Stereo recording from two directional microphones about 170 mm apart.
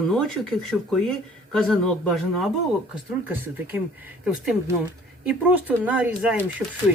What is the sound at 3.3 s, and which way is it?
Speech, 10° right (ahead or behind).